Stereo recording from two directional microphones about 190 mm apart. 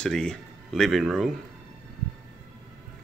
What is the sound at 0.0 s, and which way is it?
Speech, 5° left (ahead or behind).